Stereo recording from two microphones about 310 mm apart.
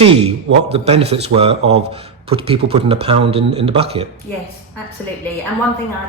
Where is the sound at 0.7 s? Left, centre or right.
Centre.